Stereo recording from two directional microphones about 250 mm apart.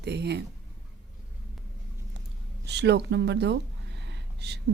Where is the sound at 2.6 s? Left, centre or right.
Right.